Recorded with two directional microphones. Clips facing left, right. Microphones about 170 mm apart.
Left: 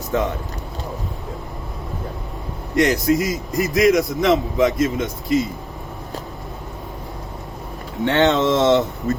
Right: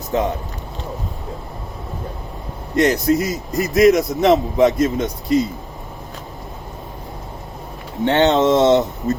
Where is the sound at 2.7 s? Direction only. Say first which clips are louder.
Right 1 dB; 30° right (ahead or behind).